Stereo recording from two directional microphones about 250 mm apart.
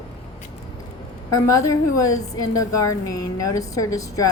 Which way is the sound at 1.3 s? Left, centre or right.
Centre.